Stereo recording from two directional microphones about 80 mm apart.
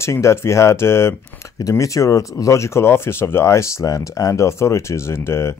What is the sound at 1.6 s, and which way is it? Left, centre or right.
Speech, left.